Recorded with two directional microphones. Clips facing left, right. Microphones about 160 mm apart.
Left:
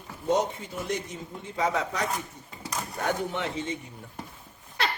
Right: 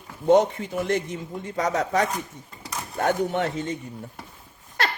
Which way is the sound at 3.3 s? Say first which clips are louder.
Right 5 dB; 45° right (ahead or behind).